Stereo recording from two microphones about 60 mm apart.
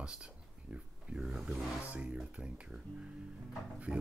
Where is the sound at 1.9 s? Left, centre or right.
Right.